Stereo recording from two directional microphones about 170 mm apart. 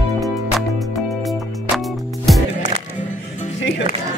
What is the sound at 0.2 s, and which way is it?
Music, centre (ahead or behind).